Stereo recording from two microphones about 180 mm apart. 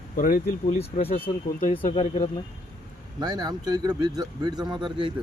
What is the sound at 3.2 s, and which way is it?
Speech, 25° right (ahead or behind).